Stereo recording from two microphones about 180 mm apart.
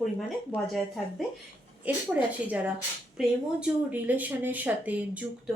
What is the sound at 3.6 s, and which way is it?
Speech, 10° right (ahead or behind).